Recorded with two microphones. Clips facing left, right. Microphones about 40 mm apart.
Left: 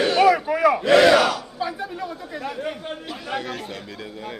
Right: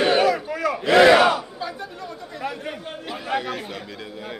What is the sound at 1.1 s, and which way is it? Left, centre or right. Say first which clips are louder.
Battle cry: right 2 dB; right.